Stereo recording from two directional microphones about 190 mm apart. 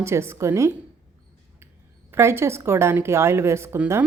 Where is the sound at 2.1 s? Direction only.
15° right (ahead or behind).